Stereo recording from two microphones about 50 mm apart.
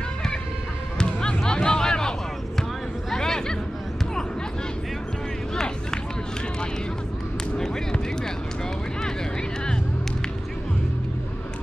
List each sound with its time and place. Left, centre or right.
0.9 s basketball bounce: centre
3.1 s music: centre
5.5 s run: centre
7.5 s a sound: centre